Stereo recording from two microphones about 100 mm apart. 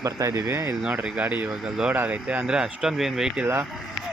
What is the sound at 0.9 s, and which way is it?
Speech, 15° right (ahead or behind).